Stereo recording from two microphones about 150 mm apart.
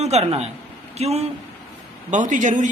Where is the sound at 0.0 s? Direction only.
45° right (ahead or behind).